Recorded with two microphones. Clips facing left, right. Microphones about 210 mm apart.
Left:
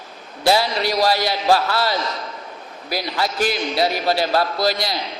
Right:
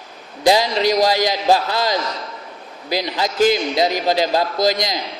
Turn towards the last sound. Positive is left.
turn(degrees=-15)  # may be behind; listen again after turning